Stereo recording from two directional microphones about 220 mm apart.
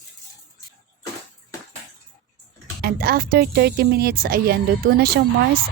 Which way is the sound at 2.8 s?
45° right (ahead or behind).